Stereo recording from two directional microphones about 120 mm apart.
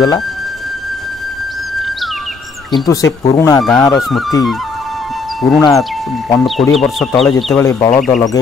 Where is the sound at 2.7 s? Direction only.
30° left (ahead or behind).